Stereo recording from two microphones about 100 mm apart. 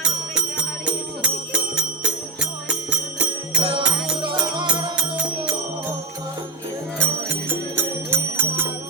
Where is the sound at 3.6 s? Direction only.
65° right (ahead or behind).